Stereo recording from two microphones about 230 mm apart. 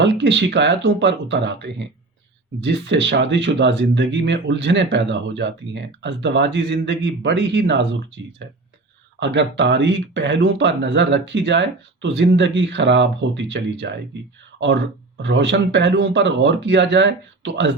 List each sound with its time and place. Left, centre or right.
0.0 s speech: right
15.2 s speech: right